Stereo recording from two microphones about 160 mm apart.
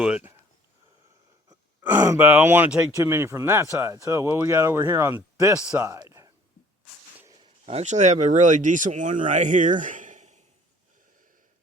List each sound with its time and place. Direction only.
0.0 s speech: 10° right (ahead or behind)
1.8 s speech: 15° right (ahead or behind)
5.5 s speech: 5° right (ahead or behind)
5.8 s a sound: 20° right (ahead or behind)
7.6 s speech: 45° right (ahead or behind)